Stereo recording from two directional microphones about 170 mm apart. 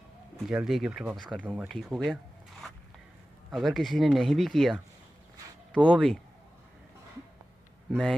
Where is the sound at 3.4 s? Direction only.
Centre (ahead or behind).